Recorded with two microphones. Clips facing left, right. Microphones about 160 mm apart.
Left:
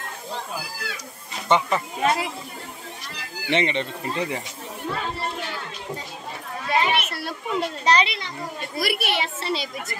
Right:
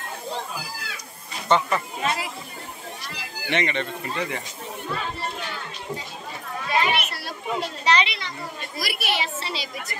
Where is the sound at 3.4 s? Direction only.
30° left (ahead or behind).